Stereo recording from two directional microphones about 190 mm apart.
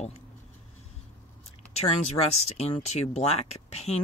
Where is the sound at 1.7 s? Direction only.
35° left (ahead or behind).